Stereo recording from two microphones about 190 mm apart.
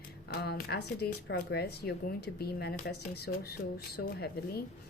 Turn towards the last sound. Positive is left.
turn(degrees=55)  # may be behind; listen again after turning